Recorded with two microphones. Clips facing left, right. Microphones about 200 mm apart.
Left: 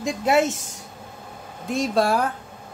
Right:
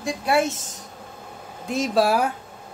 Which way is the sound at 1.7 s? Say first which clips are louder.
Right 1 dB; centre (ahead or behind).